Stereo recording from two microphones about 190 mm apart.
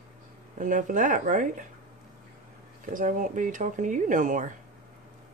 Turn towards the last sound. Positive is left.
turn(degrees=-40)  # may be behind; listen again after turning